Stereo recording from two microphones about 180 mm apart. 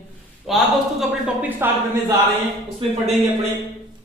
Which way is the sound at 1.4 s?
10° right (ahead or behind).